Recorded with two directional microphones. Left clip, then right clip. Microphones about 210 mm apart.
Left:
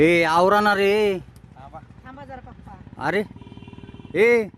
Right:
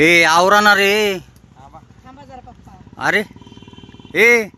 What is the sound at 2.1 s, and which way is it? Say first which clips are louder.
Boat: even; 20° right (ahead or behind).